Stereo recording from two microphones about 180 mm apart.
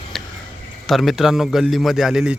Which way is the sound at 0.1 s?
Centre (ahead or behind).